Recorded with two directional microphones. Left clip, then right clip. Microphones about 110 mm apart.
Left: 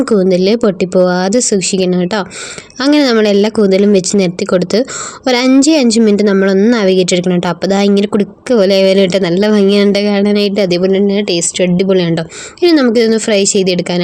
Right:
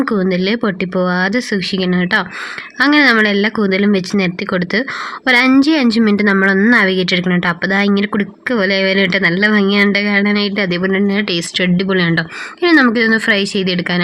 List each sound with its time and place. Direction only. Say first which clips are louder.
0.3 s speech: left 6 dB; 40° left (ahead or behind)